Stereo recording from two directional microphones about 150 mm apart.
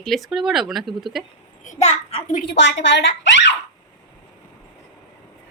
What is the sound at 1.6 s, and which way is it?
Speech, 50° left (ahead or behind).